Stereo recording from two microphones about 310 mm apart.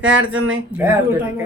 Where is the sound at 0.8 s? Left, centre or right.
Centre.